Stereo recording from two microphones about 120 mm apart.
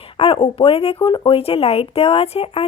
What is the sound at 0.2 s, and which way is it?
A woman's voice, 50° left (ahead or behind).